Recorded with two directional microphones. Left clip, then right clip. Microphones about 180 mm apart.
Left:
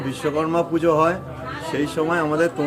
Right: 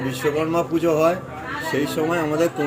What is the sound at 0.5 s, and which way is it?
Speech, 30° left (ahead or behind).